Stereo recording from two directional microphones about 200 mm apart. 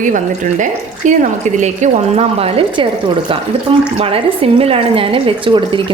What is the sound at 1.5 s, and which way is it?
Speech, 35° right (ahead or behind).